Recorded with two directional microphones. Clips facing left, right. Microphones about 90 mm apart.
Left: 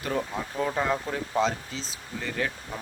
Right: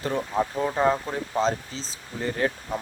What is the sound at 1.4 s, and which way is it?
Speech, 35° right (ahead or behind).